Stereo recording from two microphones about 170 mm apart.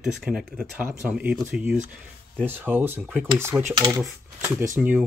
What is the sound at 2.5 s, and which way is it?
Speech, 10° right (ahead or behind).